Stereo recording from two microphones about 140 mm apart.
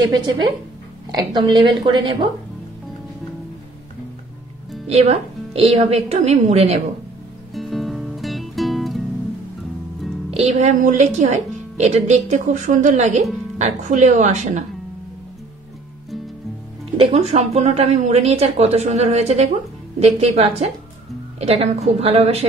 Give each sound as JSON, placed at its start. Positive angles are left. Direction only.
{"t": 0.0, "sound": "a woman's voice", "side_deg": -35}
{"t": 4.8, "sound": "a woman's voice", "side_deg": -50}
{"t": 7.5, "sound": "music", "side_deg": 0}
{"t": 10.3, "sound": "a woman's voice", "side_deg": -55}
{"t": 16.9, "sound": "a woman's voice", "side_deg": -45}